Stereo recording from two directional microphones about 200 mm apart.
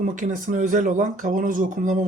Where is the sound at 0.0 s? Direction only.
40° right (ahead or behind).